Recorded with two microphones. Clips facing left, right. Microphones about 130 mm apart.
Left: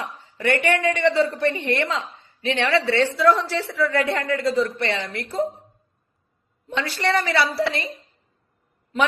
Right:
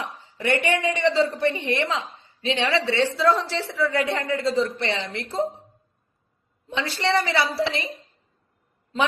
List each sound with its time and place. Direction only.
0.4 s speech: 55° left (ahead or behind)
1.1 s a woman's voice: 25° right (ahead or behind)
6.7 s a woman's voice: 20° right (ahead or behind)